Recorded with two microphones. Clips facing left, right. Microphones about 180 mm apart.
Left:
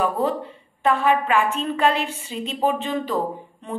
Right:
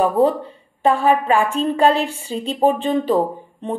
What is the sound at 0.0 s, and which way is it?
A woman's voice, 35° right (ahead or behind).